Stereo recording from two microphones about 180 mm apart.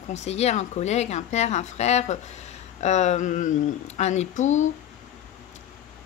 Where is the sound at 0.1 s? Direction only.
40° left (ahead or behind).